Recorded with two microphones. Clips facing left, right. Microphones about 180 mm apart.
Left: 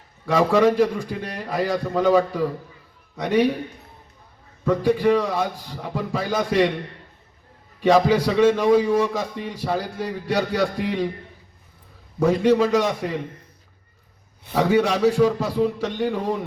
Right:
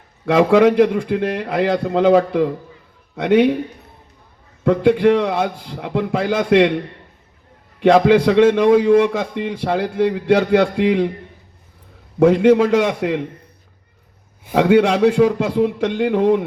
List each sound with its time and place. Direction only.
0.3 s a man's voice: 75° right (ahead or behind)
4.6 s a man's voice: 75° right (ahead or behind)
7.8 s a man's voice: 75° right (ahead or behind)
12.2 s a man's voice: 70° right (ahead or behind)
14.5 s a man's voice: 75° right (ahead or behind)